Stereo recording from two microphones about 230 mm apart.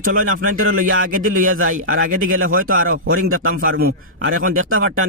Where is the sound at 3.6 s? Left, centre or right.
Right.